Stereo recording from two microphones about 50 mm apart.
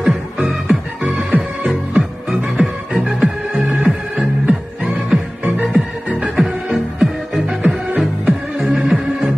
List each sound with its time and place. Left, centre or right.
0.0 s music: centre
1.0 s music: right
5.4 s music: right
6.3 s music: centre